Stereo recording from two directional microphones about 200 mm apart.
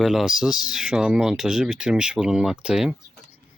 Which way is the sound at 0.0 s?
Centre (ahead or behind).